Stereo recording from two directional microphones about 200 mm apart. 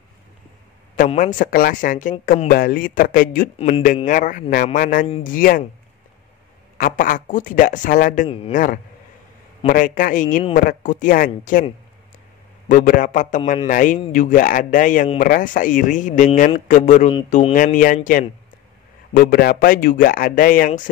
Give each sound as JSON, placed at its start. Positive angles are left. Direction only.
{"t": 0.9, "sound": "speech", "side_deg": 40}
{"t": 3.5, "sound": "speech", "side_deg": 30}
{"t": 3.8, "sound": "speech", "side_deg": 40}
{"t": 6.8, "sound": "a man's voice", "side_deg": 45}
{"t": 12.6, "sound": "a man's voice", "side_deg": 40}